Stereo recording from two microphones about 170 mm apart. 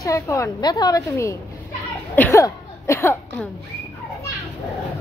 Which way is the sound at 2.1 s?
15° left (ahead or behind).